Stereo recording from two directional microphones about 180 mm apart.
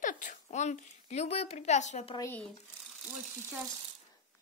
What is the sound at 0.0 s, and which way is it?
A woman's voice, 45° left (ahead or behind).